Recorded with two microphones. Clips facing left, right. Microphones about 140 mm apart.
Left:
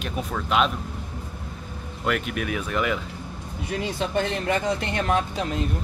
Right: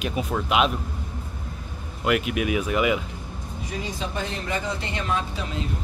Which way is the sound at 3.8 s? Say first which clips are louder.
Left 6 dB; 65° left (ahead or behind).